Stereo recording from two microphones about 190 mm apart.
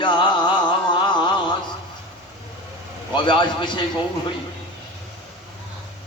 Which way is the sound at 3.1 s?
25° left (ahead or behind).